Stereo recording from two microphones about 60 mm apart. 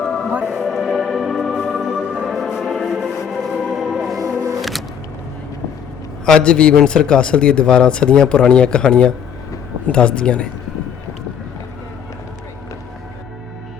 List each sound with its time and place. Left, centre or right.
0.0 s music: centre
0.3 s music: right
0.5 s music: centre
6.2 s a man's voice: centre